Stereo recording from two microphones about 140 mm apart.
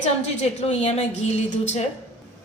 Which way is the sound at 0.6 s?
55° left (ahead or behind).